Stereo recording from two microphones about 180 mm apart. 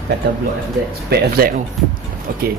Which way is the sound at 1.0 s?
60° right (ahead or behind).